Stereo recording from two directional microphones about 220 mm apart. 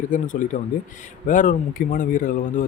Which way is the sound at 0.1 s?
35° left (ahead or behind).